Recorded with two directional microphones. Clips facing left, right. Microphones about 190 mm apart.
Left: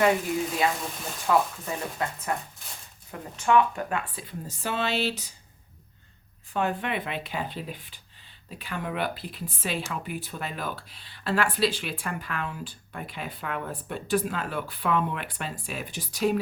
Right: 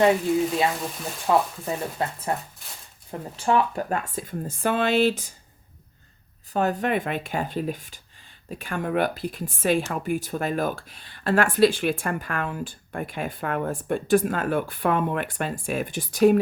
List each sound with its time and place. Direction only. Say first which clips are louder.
1.3 s speech: right 2 dB; 30° right (ahead or behind); by 5.3 s 50° right (ahead or behind)
6.5 s speech: right 5 dB; 40° right (ahead or behind)